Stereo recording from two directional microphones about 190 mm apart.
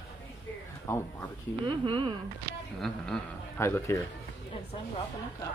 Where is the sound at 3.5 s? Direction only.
15° left (ahead or behind).